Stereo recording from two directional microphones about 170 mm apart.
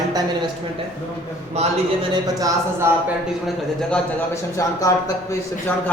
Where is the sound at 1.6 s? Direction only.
40° right (ahead or behind).